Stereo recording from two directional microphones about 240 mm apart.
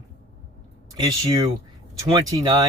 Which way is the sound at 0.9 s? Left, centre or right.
Centre.